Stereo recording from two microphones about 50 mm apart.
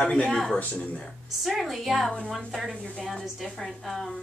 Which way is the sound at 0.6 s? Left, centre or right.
Left.